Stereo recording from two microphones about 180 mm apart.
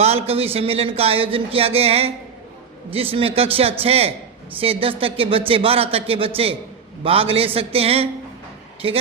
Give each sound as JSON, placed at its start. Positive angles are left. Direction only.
{"t": 0.0, "sound": "speech", "side_deg": -35}